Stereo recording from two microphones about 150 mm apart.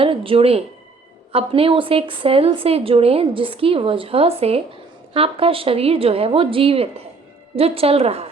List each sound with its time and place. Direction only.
0.0 s a woman's voice: 35° right (ahead or behind)